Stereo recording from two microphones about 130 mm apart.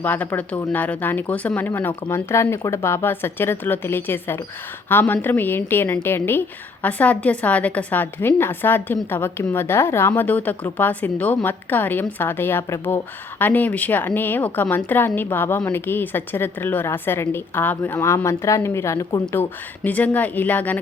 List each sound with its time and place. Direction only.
0.0 s a woman's voice: 10° left (ahead or behind)